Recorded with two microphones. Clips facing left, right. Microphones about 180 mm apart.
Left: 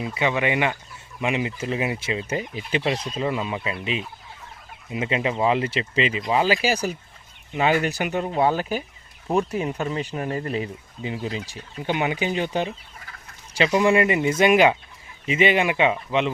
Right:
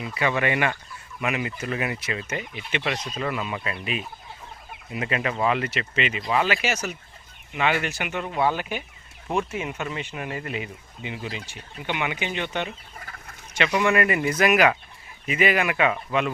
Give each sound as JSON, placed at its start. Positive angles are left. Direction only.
{"t": 0.0, "sound": "speech", "side_deg": 20}